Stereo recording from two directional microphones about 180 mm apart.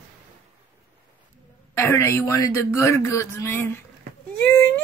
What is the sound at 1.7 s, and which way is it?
Speech, 15° left (ahead or behind).